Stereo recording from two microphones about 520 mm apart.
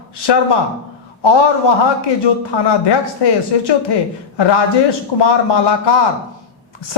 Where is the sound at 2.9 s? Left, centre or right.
Left.